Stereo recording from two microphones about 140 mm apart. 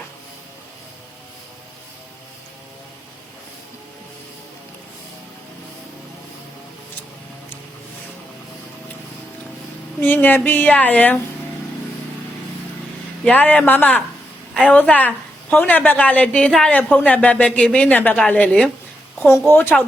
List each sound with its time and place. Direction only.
10.0 s a woman's voice: 15° left (ahead or behind)
13.2 s a woman's voice: 10° left (ahead or behind)